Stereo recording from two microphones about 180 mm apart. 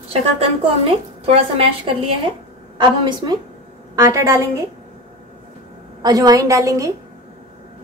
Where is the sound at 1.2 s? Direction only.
30° right (ahead or behind).